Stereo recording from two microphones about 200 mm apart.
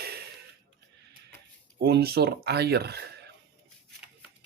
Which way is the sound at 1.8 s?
50° right (ahead or behind).